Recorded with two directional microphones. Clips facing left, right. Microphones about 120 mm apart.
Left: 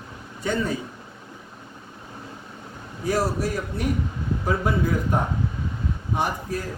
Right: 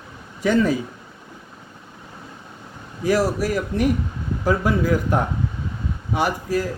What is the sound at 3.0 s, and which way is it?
Speech, 90° right.